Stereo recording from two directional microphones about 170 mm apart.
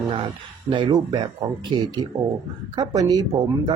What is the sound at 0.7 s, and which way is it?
Speech, 25° right (ahead or behind).